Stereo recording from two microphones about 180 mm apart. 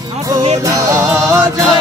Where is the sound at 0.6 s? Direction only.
20° right (ahead or behind).